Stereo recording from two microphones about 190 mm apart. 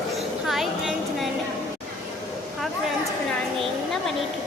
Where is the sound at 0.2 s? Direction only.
Centre (ahead or behind).